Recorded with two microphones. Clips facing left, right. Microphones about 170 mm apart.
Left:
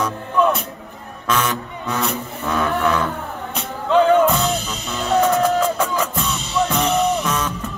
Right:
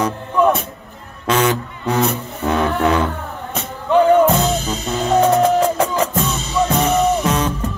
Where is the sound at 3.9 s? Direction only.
15° right (ahead or behind).